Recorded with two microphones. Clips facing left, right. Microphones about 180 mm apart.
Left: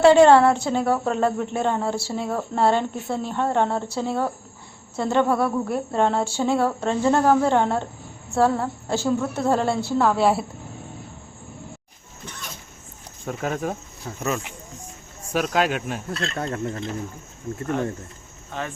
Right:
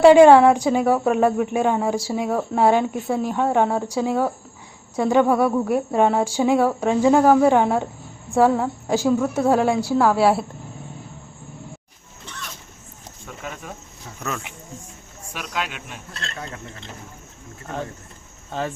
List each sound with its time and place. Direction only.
0.0 s speech: 10° right (ahead or behind)
13.2 s speech: 45° left (ahead or behind)
15.3 s speech: 45° left (ahead or behind)
18.5 s speech: 30° right (ahead or behind)